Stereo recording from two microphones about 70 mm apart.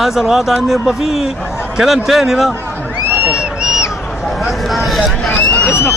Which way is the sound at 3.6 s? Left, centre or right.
Centre.